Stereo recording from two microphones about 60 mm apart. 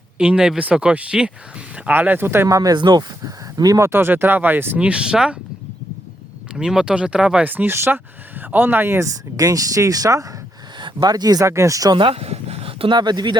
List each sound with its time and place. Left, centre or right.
0.2 s speech: centre
1.9 s speech: right
2.2 s speech: right
2.5 s speech: right
3.8 s speech: right
4.8 s speech: centre
6.5 s speech: centre
7.4 s speech: right
9.0 s speech: right
11.0 s speech: right
11.4 s speech: right